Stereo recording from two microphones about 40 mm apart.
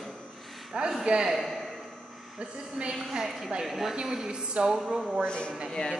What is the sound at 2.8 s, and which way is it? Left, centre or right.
A woman's voice, centre.